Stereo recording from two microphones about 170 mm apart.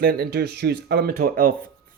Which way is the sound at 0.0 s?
65° right (ahead or behind).